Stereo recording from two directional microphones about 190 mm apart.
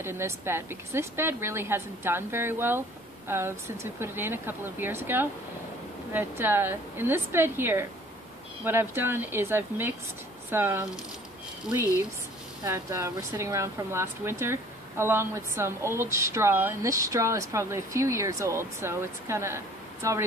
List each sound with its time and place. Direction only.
0.0 s speech: 15° right (ahead or behind)
12.6 s speech: 15° right (ahead or behind)